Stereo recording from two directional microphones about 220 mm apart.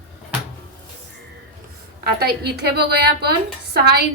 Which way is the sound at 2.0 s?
45° right (ahead or behind).